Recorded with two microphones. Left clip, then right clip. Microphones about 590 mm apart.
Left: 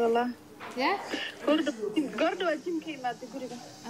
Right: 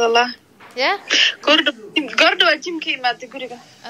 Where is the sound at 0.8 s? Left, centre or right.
Right.